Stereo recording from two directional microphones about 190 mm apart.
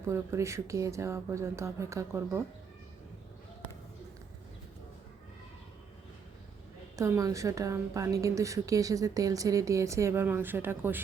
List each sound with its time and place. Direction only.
0.1 s a woman's voice: 15° right (ahead or behind)
6.9 s a woman's voice: 15° right (ahead or behind)